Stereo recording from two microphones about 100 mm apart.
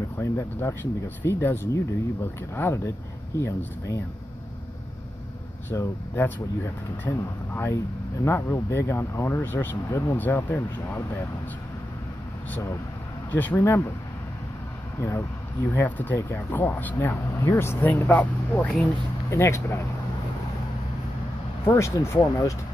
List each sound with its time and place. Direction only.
0.2 s speech: 25° left (ahead or behind)
5.7 s speech: 20° left (ahead or behind)
13.3 s speech: 15° left (ahead or behind)
15.0 s speech: 25° left (ahead or behind)
19.3 s speech: 30° left (ahead or behind)
21.6 s speech: 30° left (ahead or behind)